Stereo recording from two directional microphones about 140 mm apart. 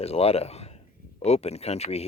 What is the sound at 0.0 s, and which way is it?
Speech, 45° left (ahead or behind).